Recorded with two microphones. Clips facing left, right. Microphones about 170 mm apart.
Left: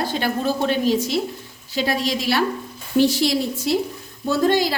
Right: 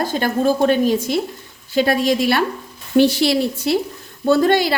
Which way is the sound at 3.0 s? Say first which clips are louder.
Right 3 dB; 70° right (ahead or behind).